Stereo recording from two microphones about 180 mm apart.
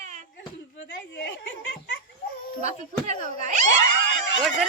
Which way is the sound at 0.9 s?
90° left.